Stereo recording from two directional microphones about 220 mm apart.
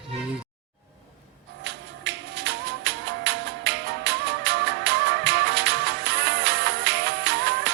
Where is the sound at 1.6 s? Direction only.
50° right (ahead or behind).